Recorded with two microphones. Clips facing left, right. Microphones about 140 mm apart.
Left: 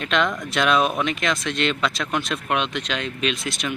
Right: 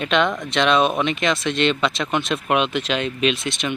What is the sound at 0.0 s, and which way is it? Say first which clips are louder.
Speech: right 3 dB; centre (ahead or behind).